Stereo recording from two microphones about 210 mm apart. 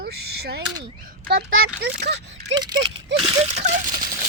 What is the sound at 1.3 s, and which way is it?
Speech, 50° right (ahead or behind).